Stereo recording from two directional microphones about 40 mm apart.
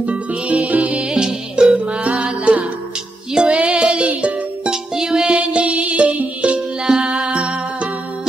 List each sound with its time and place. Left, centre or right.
0.0 s music: right
1.0 s music: centre
1.9 s music: right
4.6 s music: centre
5.4 s music: right